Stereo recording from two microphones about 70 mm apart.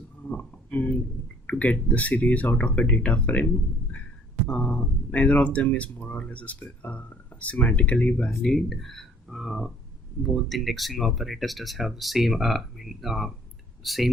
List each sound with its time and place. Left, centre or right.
0.3 s a sound: left
1.5 s speech: centre
8.4 s speech: centre